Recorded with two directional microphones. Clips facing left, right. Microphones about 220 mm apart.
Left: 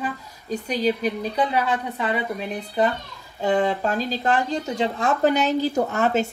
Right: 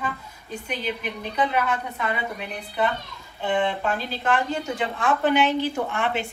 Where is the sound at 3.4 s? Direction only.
40° left (ahead or behind).